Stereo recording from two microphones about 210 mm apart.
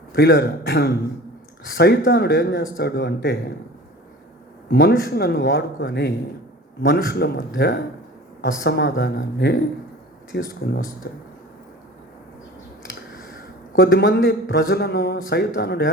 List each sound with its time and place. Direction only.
0.1 s a man's voice: 45° left (ahead or behind)
4.7 s a man's voice: 50° left (ahead or behind)
13.7 s a man's voice: 50° left (ahead or behind)